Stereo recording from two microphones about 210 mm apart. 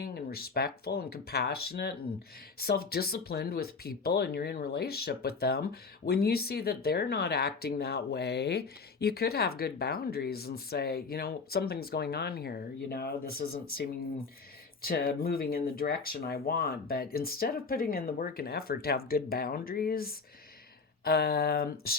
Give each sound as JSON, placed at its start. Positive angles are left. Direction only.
{"t": 0.0, "sound": "speech", "side_deg": 45}